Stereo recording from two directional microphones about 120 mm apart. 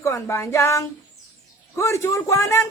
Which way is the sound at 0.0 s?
20° left (ahead or behind).